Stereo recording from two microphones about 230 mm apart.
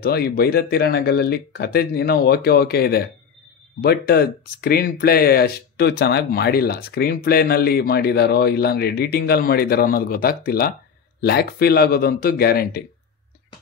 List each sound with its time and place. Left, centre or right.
0.0 s speech: left